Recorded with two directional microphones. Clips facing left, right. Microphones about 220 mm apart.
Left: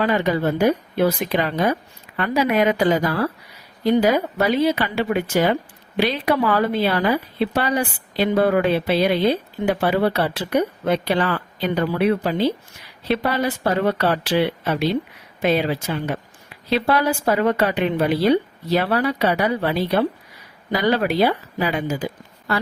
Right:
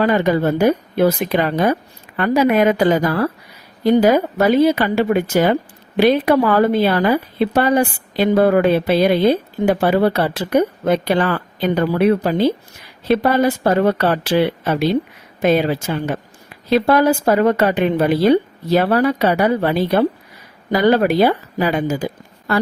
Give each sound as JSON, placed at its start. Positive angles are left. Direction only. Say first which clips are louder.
{"t": 0.0, "sound": "speech", "louder": "right 4 dB", "side_deg": -45}